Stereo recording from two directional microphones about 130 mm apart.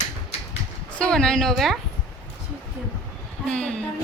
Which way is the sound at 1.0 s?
5° left (ahead or behind).